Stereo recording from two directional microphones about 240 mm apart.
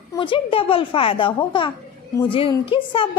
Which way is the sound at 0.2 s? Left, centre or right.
Left.